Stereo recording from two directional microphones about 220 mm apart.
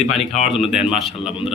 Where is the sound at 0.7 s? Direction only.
Centre (ahead or behind).